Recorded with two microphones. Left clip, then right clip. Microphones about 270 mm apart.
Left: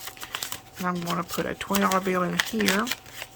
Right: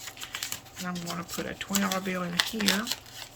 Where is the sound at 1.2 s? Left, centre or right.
Centre.